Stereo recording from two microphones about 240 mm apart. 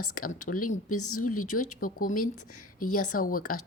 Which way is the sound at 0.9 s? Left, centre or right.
Left.